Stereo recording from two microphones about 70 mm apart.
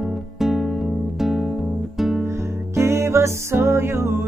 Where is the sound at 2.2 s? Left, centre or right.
Right.